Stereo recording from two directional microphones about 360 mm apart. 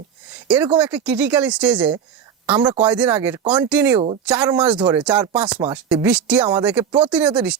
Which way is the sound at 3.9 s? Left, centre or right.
Centre.